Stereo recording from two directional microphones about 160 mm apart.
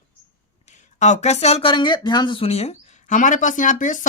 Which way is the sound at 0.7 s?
50° left (ahead or behind).